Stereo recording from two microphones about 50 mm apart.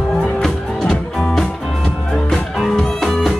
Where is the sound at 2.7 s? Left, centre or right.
Centre.